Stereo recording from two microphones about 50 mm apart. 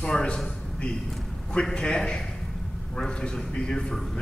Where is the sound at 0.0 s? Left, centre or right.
Centre.